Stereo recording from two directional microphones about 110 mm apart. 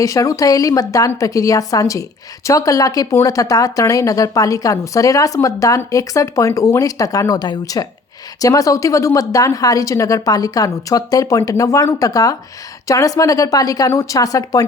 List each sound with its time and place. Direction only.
0.0 s a woman's voice: 30° left (ahead or behind)